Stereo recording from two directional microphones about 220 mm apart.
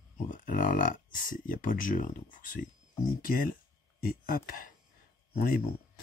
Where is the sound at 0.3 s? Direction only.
35° left (ahead or behind).